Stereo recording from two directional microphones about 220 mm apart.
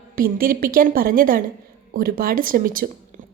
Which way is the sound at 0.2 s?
40° right (ahead or behind).